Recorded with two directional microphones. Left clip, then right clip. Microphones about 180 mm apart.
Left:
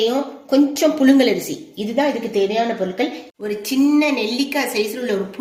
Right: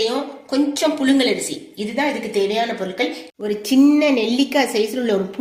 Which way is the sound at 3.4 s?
45° right (ahead or behind).